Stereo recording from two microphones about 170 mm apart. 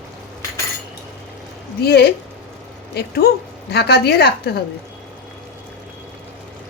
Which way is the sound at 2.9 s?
70° left (ahead or behind).